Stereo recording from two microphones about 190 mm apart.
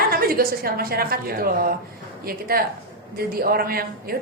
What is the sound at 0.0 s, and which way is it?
A woman's voice, 50° right (ahead or behind).